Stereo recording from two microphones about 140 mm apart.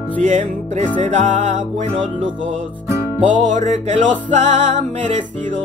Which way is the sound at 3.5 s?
65° right (ahead or behind).